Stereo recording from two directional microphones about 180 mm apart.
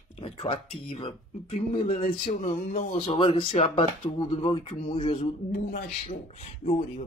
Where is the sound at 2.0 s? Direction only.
50° left (ahead or behind).